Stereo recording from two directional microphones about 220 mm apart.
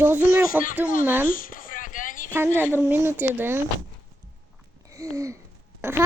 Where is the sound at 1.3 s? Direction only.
40° left (ahead or behind).